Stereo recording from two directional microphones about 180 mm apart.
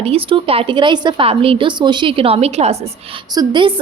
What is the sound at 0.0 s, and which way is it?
A woman's voice, 30° right (ahead or behind).